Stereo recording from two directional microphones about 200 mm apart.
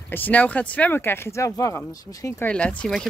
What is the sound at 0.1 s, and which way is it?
Speech, 10° left (ahead or behind).